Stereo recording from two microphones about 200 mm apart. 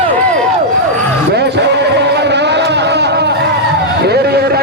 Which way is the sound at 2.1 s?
60° right (ahead or behind).